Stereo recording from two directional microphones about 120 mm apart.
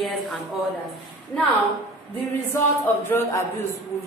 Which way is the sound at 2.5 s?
20° left (ahead or behind).